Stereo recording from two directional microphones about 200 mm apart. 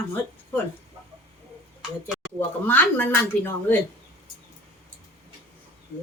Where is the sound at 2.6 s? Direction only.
10° left (ahead or behind).